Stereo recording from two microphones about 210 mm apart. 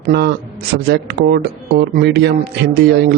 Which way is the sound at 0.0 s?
50° right (ahead or behind).